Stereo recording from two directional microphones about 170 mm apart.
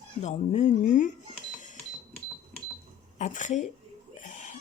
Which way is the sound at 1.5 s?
45° left (ahead or behind).